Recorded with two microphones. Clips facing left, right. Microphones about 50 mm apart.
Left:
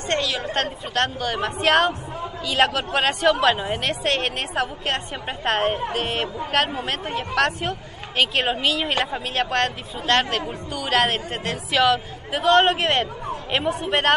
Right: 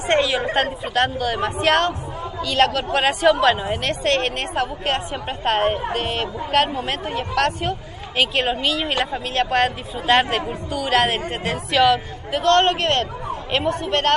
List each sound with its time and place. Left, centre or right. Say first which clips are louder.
0.1 s a woman's voice: right 5 dB; centre
3.5 s a man's voice: right 2 dB; centre
3.8 s a woman's voice: right 4 dB; centre